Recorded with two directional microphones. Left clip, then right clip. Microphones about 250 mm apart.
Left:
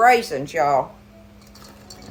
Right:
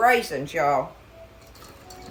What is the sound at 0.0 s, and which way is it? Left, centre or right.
Speech, centre.